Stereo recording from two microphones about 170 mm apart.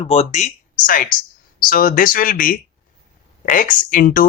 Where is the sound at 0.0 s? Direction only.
35° left (ahead or behind).